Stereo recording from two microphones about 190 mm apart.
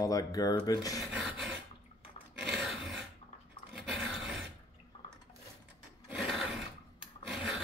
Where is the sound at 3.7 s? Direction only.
Centre (ahead or behind).